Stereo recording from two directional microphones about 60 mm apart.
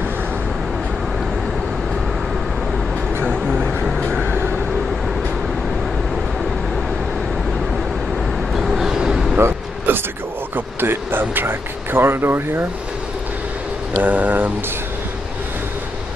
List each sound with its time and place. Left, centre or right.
3.4 s vehicle: centre
4.2 s vehicle: right
8.5 s vehicle: centre
9.4 s a sound: right
14.0 s speech: right